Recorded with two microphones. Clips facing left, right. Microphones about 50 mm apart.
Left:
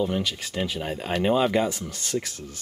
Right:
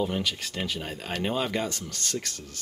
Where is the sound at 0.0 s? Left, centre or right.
Centre.